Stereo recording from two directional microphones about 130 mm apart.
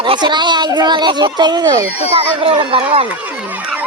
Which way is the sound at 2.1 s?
45° right (ahead or behind).